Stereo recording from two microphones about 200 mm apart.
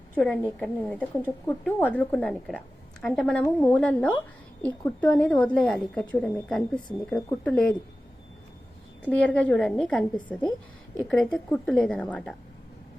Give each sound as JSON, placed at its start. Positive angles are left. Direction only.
{"t": 0.1, "sound": "a woman's voice", "side_deg": 5}
{"t": 9.0, "sound": "a woman's voice", "side_deg": 5}